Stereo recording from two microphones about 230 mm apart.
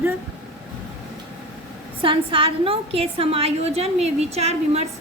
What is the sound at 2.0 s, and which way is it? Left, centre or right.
A woman's voice, right.